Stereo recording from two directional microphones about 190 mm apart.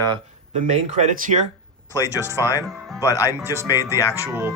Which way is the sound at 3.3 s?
15° right (ahead or behind).